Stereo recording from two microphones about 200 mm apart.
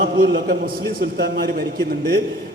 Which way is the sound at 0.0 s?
50° right (ahead or behind).